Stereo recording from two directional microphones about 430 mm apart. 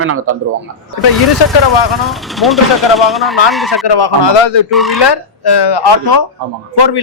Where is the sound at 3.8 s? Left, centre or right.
Left.